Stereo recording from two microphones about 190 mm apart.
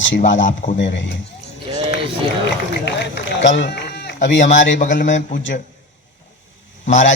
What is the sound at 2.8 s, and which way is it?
A man's voice, 70° left (ahead or behind).